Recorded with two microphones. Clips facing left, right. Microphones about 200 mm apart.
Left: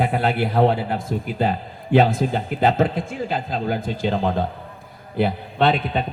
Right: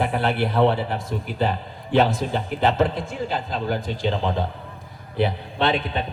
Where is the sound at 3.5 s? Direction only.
50° left (ahead or behind).